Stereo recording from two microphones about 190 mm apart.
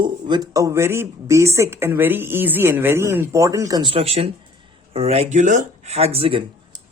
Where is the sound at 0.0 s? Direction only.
20° right (ahead or behind).